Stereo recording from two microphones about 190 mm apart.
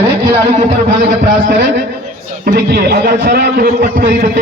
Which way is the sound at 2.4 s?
55° right (ahead or behind).